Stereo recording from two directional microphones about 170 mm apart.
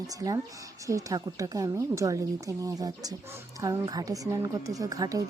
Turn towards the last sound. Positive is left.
turn(degrees=-20)  # may be behind; listen again after turning